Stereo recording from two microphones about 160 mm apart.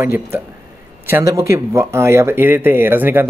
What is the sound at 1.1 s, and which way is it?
Speech, 15° right (ahead or behind).